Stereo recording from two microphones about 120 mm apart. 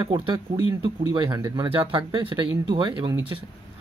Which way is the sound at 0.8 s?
35° right (ahead or behind).